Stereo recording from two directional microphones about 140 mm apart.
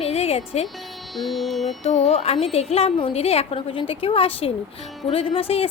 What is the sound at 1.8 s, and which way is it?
A woman's voice, 50° left (ahead or behind).